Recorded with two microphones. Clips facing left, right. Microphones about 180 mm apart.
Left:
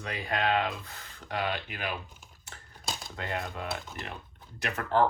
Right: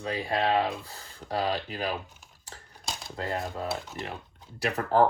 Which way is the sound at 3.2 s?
35° right (ahead or behind).